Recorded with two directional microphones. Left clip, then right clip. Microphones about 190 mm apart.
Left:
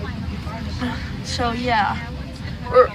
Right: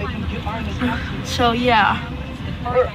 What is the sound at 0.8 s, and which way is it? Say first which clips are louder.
A woman's voice: right 3 dB; 10° right (ahead or behind).